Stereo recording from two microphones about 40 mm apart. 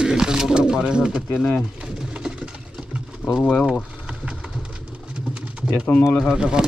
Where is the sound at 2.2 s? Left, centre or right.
Right.